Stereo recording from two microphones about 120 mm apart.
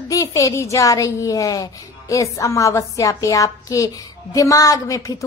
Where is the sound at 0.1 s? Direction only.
25° left (ahead or behind).